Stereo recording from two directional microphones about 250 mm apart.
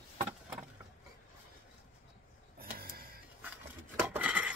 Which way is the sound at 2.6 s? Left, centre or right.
Right.